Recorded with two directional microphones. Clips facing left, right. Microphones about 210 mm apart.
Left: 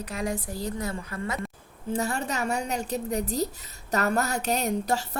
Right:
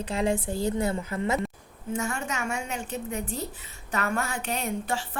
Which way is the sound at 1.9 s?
35° left (ahead or behind).